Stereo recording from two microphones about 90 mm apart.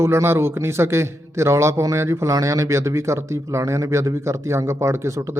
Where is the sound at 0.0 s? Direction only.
30° right (ahead or behind).